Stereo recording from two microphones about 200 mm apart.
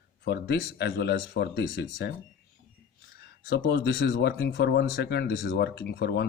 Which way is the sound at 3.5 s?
55° left (ahead or behind).